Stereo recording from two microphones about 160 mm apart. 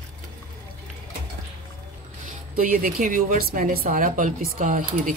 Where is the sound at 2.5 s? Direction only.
60° right (ahead or behind).